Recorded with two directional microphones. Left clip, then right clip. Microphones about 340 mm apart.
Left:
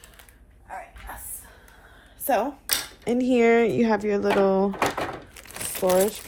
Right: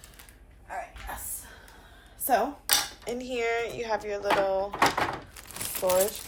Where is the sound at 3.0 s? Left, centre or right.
Left.